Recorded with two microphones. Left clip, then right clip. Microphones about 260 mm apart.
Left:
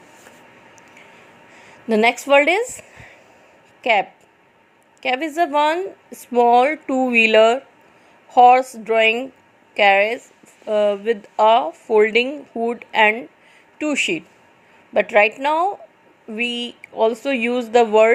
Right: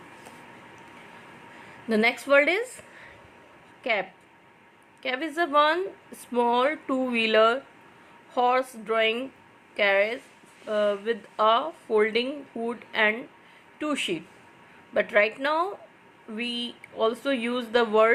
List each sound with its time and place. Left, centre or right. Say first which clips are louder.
1.9 s speech: left 7 dB; left
3.8 s a woman's voice: left 10 dB; left
5.0 s speech: left 8 dB; left